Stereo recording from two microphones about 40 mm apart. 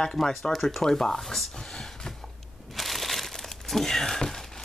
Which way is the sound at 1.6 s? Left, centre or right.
Centre.